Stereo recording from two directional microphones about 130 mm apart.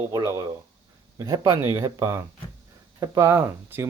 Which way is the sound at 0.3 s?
25° right (ahead or behind).